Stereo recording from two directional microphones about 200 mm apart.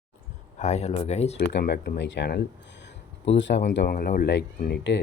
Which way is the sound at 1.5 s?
55° left (ahead or behind).